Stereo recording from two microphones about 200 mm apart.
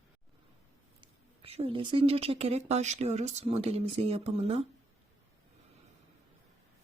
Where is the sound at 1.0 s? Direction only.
30° right (ahead or behind).